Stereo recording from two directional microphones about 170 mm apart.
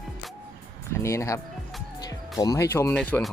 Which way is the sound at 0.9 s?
15° left (ahead or behind).